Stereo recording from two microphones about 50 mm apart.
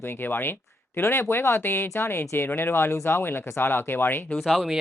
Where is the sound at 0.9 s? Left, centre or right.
Left.